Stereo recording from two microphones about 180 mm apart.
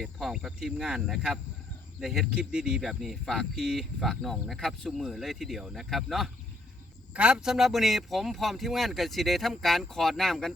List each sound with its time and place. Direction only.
0.0 s speech: centre (ahead or behind)